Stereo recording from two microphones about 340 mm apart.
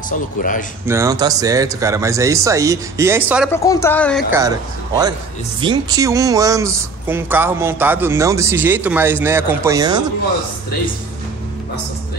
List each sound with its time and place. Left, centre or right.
0.1 s speech: left
0.8 s speech: centre
3.5 s a woman's voice: centre
4.3 s speech: centre